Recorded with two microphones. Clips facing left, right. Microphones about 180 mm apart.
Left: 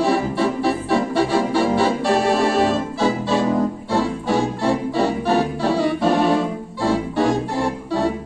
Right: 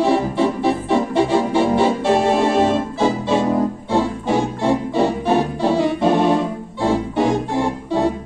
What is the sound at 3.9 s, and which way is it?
Music, 20° right (ahead or behind).